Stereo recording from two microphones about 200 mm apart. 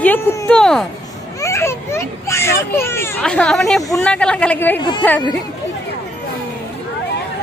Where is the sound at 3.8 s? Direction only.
15° left (ahead or behind).